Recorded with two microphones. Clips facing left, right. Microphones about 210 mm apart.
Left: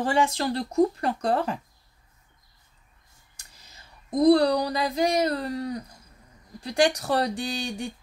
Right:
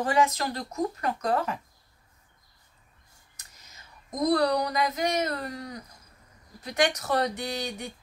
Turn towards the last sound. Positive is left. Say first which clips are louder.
# left 2 dB
turn(degrees=30)  # may be behind; listen again after turning